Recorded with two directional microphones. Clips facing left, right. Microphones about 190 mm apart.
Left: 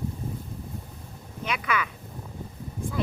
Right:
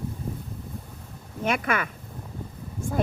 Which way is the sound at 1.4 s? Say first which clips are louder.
Right 3 dB; 50° right (ahead or behind).